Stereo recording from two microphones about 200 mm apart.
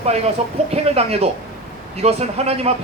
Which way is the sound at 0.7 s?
30° right (ahead or behind).